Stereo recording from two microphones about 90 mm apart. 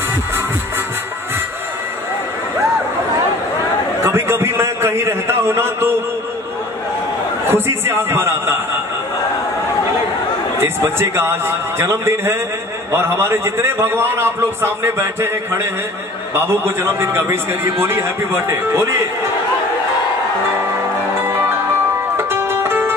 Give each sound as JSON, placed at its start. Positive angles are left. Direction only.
{"t": 4.0, "sound": "a sound", "side_deg": -30}
{"t": 7.4, "sound": "a man's voice", "side_deg": -25}
{"t": 10.6, "sound": "a man's voice", "side_deg": -25}
{"t": 22.1, "sound": "music", "side_deg": -25}